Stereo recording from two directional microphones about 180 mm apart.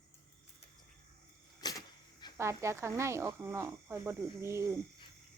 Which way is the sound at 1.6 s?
20° left (ahead or behind).